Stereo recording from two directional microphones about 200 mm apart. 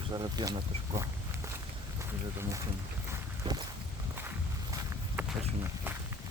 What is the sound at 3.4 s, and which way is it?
Walk, 25° right (ahead or behind).